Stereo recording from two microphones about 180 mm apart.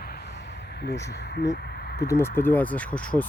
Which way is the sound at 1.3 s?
60° left (ahead or behind).